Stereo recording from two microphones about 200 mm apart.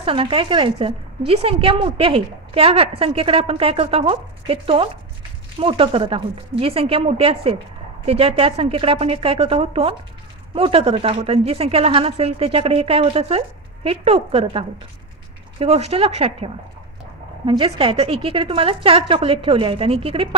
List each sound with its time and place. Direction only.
0.0 s a woman's voice: 25° right (ahead or behind)